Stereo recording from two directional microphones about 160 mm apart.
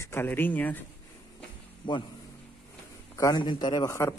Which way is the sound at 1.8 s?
30° left (ahead or behind).